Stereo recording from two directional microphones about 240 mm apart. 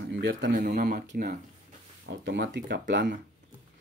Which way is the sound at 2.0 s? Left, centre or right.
Right.